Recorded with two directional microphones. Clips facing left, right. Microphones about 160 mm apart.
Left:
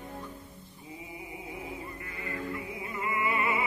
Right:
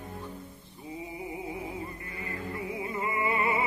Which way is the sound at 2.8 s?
30° right (ahead or behind).